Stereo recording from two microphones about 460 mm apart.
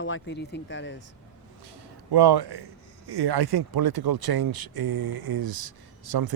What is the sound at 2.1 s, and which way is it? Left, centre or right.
Speech, right.